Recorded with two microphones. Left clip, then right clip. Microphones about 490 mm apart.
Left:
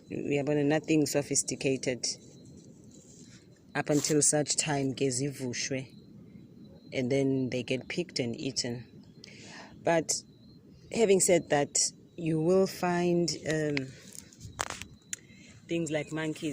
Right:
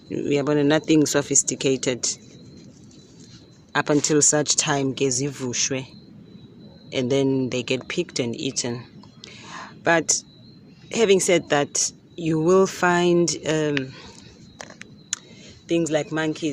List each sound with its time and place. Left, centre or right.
0.4 s speech: right
3.7 s speech: right
6.9 s speech: right
9.2 s a sound: right
10.8 s speech: right
15.6 s speech: right